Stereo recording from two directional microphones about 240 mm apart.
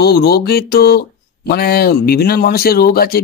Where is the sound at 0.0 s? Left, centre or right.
Left.